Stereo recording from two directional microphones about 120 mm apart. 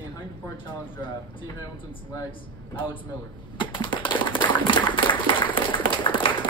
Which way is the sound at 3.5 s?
45° left (ahead or behind).